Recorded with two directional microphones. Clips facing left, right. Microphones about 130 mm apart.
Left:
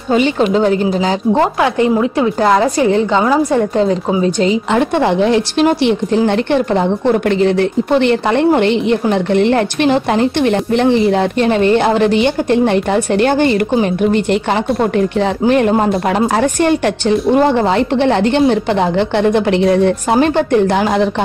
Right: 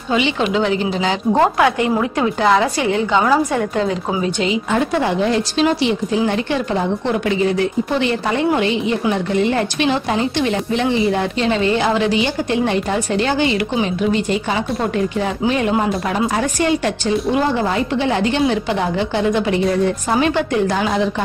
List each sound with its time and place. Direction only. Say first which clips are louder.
0.5 s a woman's voice: left 5 dB; 40° left (ahead or behind)
2.6 s a woman's voice: left 5 dB; 35° left (ahead or behind)
4.7 s a woman's voice: left 4 dB; 60° left (ahead or behind)